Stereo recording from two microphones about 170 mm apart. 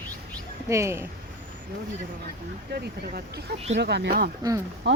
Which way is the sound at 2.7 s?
70° right (ahead or behind).